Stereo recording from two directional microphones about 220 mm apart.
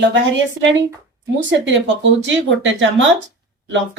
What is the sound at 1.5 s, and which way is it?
Speech, 55° right (ahead or behind).